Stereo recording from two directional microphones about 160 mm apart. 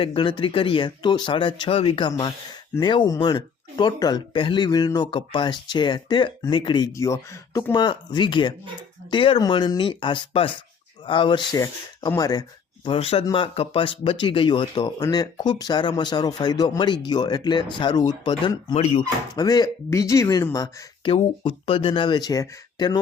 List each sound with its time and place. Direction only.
0.0 s speech: 35° left (ahead or behind)
18.7 s speech: 45° left (ahead or behind)
19.4 s speech: 25° left (ahead or behind)
21.1 s speech: 35° left (ahead or behind)